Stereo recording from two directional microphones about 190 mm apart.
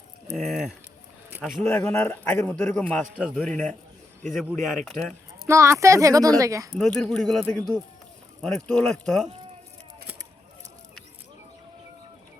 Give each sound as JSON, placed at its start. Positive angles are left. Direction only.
{"t": 0.3, "sound": "a man's voice", "side_deg": 0}
{"t": 3.2, "sound": "speech", "side_deg": -5}
{"t": 4.9, "sound": "speech", "side_deg": 0}
{"t": 5.5, "sound": "speech", "side_deg": -15}
{"t": 6.7, "sound": "speech", "side_deg": 5}